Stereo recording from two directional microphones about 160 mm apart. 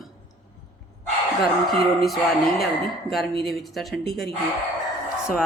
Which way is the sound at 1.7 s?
Centre (ahead or behind).